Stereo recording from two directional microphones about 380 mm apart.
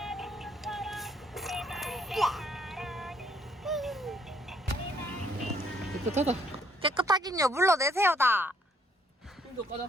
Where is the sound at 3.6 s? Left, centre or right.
Centre.